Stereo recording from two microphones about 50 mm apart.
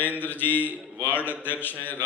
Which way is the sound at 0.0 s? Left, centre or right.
Left.